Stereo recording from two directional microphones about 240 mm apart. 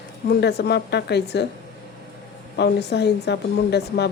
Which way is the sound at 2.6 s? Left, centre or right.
Left.